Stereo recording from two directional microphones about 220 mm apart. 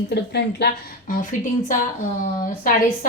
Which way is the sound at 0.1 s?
50° left (ahead or behind).